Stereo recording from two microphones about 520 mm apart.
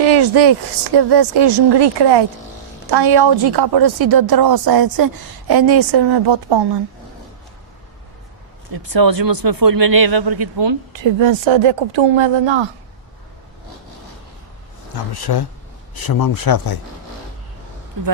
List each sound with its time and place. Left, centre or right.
0.0 s a woman's voice: right
8.7 s a woman's voice: right
15.1 s speech: left